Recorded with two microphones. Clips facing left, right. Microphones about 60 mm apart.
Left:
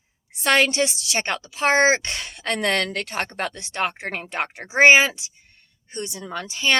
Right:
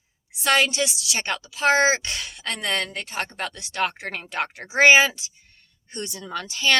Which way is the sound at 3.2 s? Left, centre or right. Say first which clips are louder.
Left 1 dB; left.